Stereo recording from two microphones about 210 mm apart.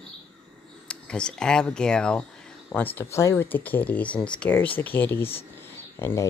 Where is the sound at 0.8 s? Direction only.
5° left (ahead or behind).